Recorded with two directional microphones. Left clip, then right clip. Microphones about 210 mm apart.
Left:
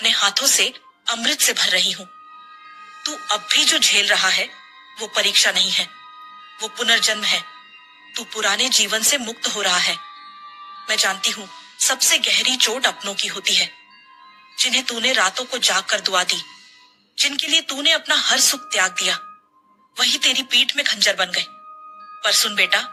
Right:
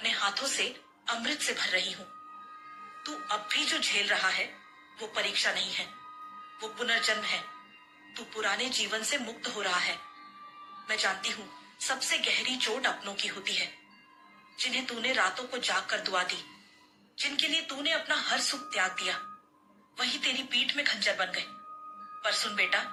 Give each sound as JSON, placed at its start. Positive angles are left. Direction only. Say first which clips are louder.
{"t": 0.0, "sound": "speech", "louder": "left 12 dB", "side_deg": 45}